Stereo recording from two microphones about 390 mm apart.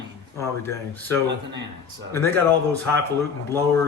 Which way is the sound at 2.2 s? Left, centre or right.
Centre.